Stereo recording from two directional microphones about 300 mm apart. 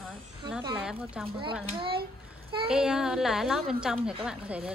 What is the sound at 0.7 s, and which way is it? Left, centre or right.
Speech, centre.